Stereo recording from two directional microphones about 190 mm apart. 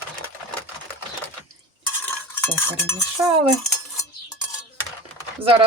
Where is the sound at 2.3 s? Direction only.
15° left (ahead or behind).